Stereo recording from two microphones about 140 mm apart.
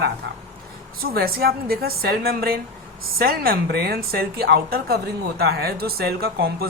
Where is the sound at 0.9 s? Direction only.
90° right.